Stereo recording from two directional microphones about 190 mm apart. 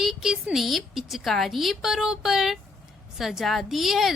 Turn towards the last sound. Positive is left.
turn(degrees=0)  # may be behind; listen again after turning